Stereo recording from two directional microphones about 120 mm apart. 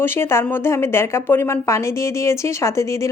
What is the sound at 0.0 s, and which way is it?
Speech, 20° left (ahead or behind).